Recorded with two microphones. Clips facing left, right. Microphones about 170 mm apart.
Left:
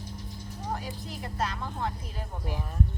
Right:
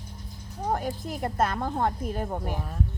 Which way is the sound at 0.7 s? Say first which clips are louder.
Right 7 dB; 50° right (ahead or behind).